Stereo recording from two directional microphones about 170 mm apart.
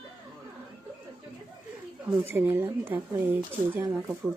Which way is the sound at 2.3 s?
10° right (ahead or behind).